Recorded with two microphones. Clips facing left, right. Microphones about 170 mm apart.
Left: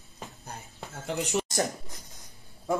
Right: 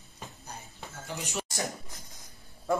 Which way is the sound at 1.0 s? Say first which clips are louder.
Left 8 dB; 65° left (ahead or behind).